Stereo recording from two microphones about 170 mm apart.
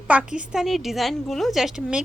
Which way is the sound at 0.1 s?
5° right (ahead or behind).